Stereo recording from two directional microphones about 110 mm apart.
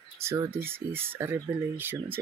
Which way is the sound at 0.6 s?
20° right (ahead or behind).